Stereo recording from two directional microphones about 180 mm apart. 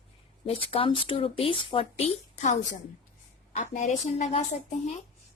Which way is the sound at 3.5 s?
45° left (ahead or behind).